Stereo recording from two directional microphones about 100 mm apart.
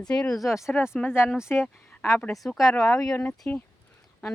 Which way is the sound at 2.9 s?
30° left (ahead or behind).